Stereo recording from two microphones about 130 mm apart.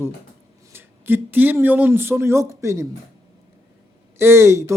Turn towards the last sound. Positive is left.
turn(degrees=-20)  # may be behind; listen again after turning